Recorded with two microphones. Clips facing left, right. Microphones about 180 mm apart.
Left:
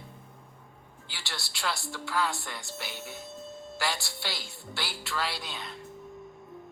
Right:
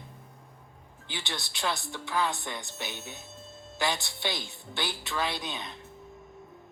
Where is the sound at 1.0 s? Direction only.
20° right (ahead or behind).